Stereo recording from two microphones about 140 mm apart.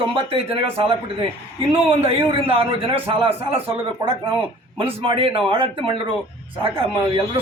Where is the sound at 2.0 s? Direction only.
45° right (ahead or behind).